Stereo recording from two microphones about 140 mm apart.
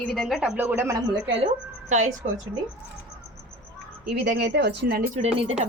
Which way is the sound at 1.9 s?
55° right (ahead or behind).